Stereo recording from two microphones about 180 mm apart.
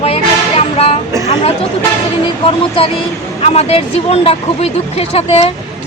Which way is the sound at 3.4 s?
35° left (ahead or behind).